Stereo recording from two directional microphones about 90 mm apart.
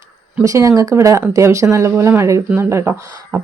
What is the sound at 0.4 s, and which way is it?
Speech, 35° right (ahead or behind).